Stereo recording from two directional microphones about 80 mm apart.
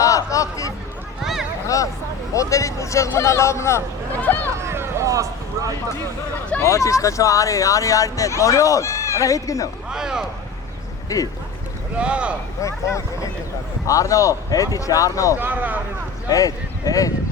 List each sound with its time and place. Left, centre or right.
0.0 s a sound: left
1.2 s a sound: centre
1.6 s vehicle: left
2.3 s speech: left
4.2 s speech: left
4.6 s a sound: right
5.0 s speech: right
6.6 s speech: left
9.9 s speech: centre
11.1 s speech: left
11.9 s speech: centre
13.8 s speech: left
15.4 s speech: right
16.3 s speech: left